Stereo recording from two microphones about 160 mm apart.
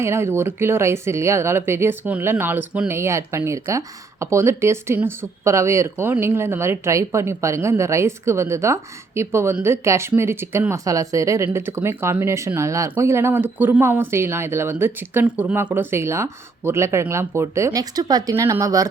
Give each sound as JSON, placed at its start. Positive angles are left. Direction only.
{"t": 0.0, "sound": "speech", "side_deg": -15}